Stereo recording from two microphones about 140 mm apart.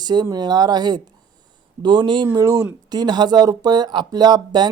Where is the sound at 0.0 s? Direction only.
30° right (ahead or behind).